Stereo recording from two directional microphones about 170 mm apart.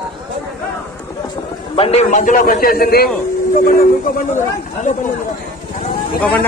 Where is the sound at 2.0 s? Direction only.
50° left (ahead or behind).